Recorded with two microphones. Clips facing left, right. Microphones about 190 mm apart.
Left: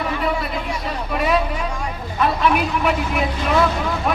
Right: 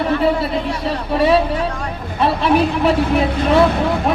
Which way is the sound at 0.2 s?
30° right (ahead or behind).